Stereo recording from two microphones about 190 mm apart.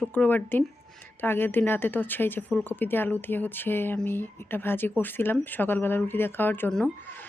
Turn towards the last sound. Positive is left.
turn(degrees=10)  # may be behind; listen again after turning